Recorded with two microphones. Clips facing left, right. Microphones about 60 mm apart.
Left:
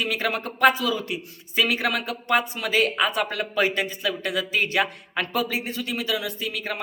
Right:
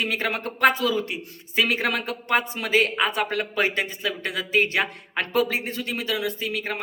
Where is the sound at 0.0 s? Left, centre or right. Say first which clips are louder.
Even; right.